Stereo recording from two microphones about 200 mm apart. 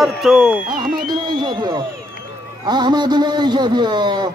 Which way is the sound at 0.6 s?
45° right (ahead or behind).